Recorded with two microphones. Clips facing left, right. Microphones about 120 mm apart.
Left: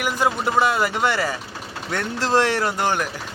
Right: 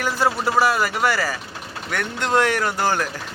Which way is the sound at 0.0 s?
20° left (ahead or behind).